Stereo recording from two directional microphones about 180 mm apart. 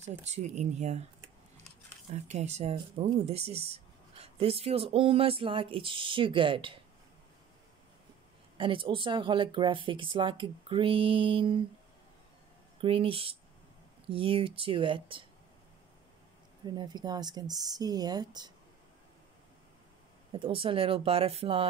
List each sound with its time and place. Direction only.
0.2 s speech: 40° right (ahead or behind)
2.1 s speech: 40° right (ahead or behind)
8.5 s speech: 30° right (ahead or behind)
12.8 s speech: 30° right (ahead or behind)
16.6 s speech: 25° right (ahead or behind)
20.3 s speech: 30° right (ahead or behind)